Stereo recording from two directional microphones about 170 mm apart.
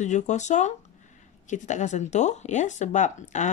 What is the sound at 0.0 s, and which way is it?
Speech, 45° left (ahead or behind).